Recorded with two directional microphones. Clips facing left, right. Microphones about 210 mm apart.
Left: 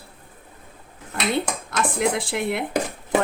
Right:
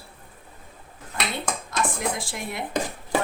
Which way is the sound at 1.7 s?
65° left (ahead or behind).